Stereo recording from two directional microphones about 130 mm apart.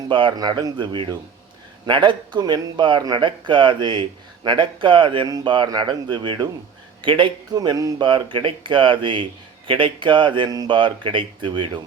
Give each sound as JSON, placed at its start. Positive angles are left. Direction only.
{"t": 0.1, "sound": "speech", "side_deg": -40}